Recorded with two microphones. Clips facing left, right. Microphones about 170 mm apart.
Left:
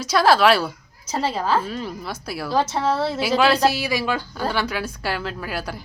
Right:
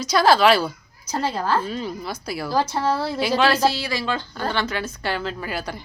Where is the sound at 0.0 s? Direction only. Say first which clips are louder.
Even; 5° left (ahead or behind).